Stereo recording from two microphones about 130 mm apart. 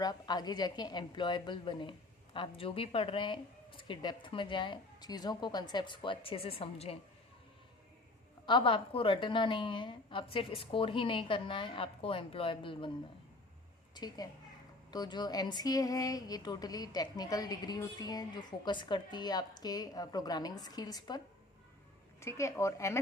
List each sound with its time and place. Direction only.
0.0 s a woman's voice: 30° left (ahead or behind); by 7.0 s 50° left (ahead or behind)
8.4 s a woman's voice: 40° left (ahead or behind)
13.9 s a woman's voice: 30° left (ahead or behind)
22.2 s a woman's voice: 20° left (ahead or behind)